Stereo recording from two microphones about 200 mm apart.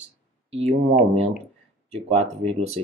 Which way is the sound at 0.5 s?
30° right (ahead or behind).